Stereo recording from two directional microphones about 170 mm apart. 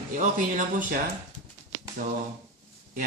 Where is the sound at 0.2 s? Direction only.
50° right (ahead or behind).